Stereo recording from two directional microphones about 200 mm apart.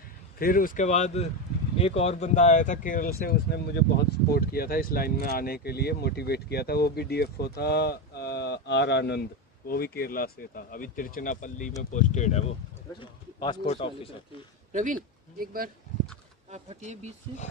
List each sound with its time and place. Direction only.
0.4 s speech: 45° left (ahead or behind)
13.0 s speech: 25° left (ahead or behind)
14.7 s speech: 40° right (ahead or behind)
16.4 s speech: 35° right (ahead or behind)